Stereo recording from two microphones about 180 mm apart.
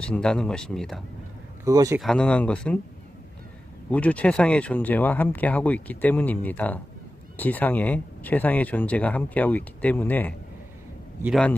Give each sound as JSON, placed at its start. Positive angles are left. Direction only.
{"t": 0.0, "sound": "speech", "side_deg": 5}
{"t": 1.6, "sound": "speech", "side_deg": -20}
{"t": 2.0, "sound": "speech", "side_deg": 5}
{"t": 3.8, "sound": "speech", "side_deg": 5}